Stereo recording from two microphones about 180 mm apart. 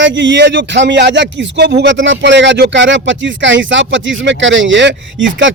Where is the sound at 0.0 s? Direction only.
85° right.